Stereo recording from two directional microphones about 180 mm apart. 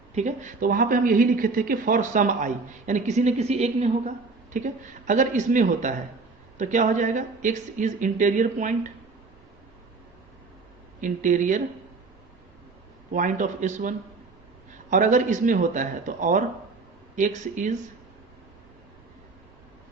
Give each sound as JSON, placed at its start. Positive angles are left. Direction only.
{"t": 0.1, "sound": "a woman's voice", "side_deg": -40}
{"t": 11.0, "sound": "a woman's voice", "side_deg": -45}
{"t": 13.1, "sound": "a woman's voice", "side_deg": -45}